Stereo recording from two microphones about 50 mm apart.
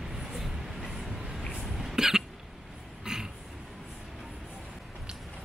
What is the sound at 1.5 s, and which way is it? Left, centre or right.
Throat clearing, centre.